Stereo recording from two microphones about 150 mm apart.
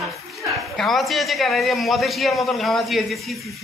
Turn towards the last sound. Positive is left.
turn(degrees=0)  # may be behind; listen again after turning